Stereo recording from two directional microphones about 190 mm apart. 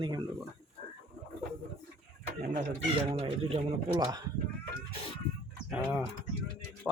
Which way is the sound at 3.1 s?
30° right (ahead or behind).